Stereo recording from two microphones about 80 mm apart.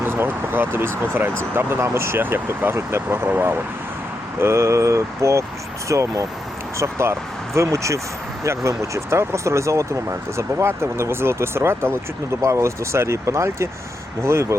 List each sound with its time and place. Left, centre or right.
0.0 s speech: right